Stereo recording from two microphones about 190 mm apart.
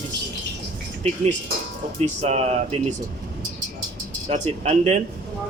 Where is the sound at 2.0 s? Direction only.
35° right (ahead or behind).